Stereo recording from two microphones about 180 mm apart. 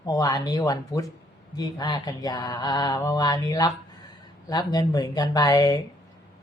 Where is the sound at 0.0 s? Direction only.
20° left (ahead or behind).